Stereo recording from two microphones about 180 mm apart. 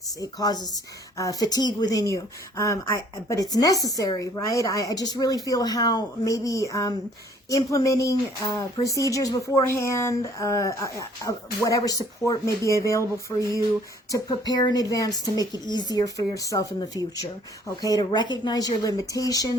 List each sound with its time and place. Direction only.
0.2 s a woman's voice: 20° left (ahead or behind)
14.1 s a woman's voice: 20° left (ahead or behind)